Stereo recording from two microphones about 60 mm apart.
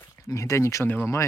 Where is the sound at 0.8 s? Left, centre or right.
Left.